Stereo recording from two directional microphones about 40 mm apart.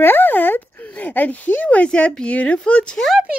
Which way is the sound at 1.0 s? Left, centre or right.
Left.